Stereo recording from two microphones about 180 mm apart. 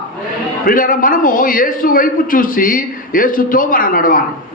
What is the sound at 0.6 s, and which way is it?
A man's voice, 50° left (ahead or behind).